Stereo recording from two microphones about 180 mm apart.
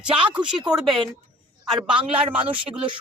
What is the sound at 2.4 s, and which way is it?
Speech, 30° right (ahead or behind).